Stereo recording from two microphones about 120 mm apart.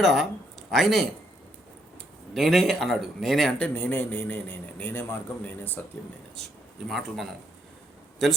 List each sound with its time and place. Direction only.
0.0 s speech: centre (ahead or behind)
2.3 s speech: centre (ahead or behind)
3.8 s a man's voice: 15° left (ahead or behind)
6.3 s speech: centre (ahead or behind)